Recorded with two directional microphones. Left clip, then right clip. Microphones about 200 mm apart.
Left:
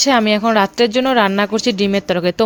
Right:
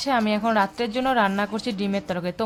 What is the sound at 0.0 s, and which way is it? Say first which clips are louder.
A woman's voice: left 9 dB; 35° left (ahead or behind).